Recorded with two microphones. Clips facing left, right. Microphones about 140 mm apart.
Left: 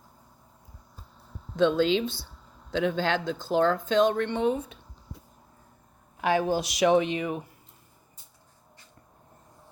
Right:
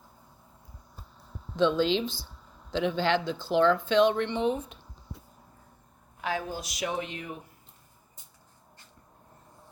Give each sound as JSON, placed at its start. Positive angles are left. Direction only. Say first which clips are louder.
{"t": 1.5, "sound": "speech", "louder": "left 2 dB", "side_deg": 50}
{"t": 6.2, "sound": "speech", "louder": "left 8 dB", "side_deg": 70}